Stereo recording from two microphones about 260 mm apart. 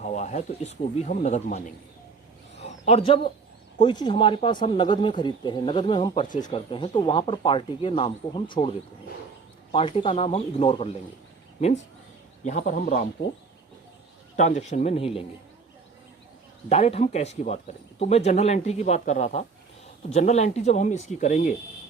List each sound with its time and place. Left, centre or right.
0.0 s speech: left
2.6 s a sound: left
3.8 s speech: centre
9.7 s speech: left
12.5 s speech: left
14.3 s speech: left
16.6 s speech: left